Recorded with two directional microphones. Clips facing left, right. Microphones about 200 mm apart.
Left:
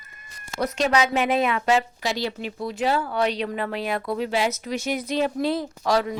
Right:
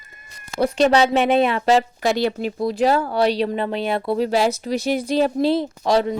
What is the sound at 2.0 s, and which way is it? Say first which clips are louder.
Speech: right 7 dB; 55° right (ahead or behind).